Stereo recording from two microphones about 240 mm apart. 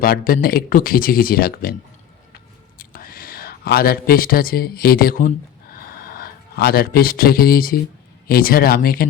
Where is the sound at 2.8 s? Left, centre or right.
Left.